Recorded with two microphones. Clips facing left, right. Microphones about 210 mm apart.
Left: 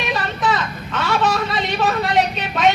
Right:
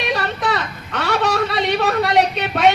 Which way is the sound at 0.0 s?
65° right (ahead or behind).